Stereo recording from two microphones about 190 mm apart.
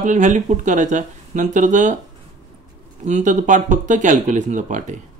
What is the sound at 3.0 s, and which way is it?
Speech, 40° right (ahead or behind).